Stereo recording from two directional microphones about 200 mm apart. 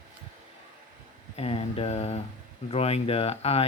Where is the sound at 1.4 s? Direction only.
30° left (ahead or behind).